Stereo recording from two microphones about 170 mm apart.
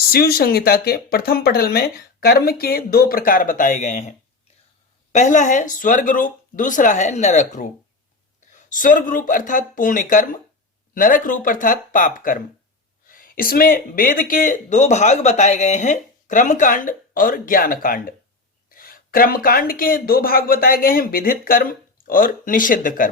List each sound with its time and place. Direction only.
0.1 s speech: 65° left (ahead or behind); by 4.1 s 45° left (ahead or behind)
5.1 s speech: 45° left (ahead or behind)